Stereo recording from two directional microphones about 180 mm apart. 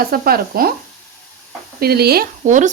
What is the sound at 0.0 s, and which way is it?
Speech, 55° right (ahead or behind).